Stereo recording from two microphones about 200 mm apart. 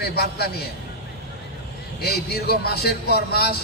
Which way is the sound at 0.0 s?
50° left (ahead or behind).